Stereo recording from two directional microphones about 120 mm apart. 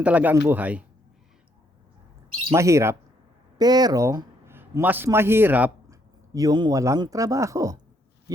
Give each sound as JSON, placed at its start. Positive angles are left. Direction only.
{"t": 0.0, "sound": "a man's voice", "side_deg": -15}
{"t": 2.6, "sound": "speech", "side_deg": -25}
{"t": 4.5, "sound": "a man's voice", "side_deg": -15}
{"t": 5.9, "sound": "speech", "side_deg": -30}